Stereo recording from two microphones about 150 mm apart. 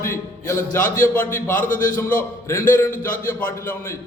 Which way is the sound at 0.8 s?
65° left (ahead or behind).